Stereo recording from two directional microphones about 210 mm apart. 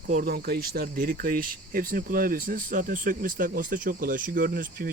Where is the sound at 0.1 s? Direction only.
45° right (ahead or behind).